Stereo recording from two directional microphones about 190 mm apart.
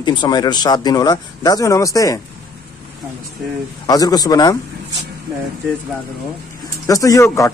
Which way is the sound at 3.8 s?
20° left (ahead or behind).